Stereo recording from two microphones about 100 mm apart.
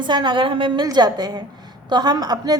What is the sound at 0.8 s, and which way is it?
A woman's voice, 45° right (ahead or behind).